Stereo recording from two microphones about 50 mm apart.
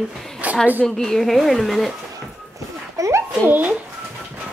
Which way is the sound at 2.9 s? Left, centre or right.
Right.